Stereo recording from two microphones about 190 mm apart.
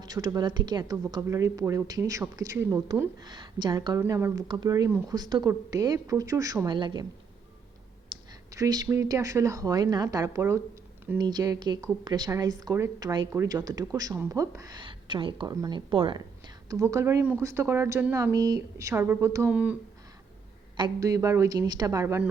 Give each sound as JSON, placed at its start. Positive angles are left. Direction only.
{"t": 0.0, "sound": "speech", "side_deg": -20}
{"t": 8.1, "sound": "a woman's voice", "side_deg": -20}
{"t": 20.7, "sound": "a woman's voice", "side_deg": -20}